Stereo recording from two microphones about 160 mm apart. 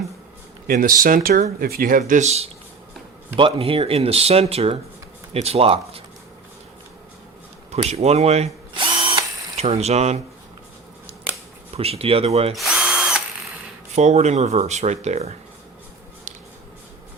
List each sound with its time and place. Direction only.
0.7 s speech: 60° right (ahead or behind); by 6.0 s 35° right (ahead or behind)
7.7 s drill: 40° right (ahead or behind)
11.7 s speech: 40° right (ahead or behind)
12.5 s drill: 5° right (ahead or behind)
13.9 s speech: 45° right (ahead or behind)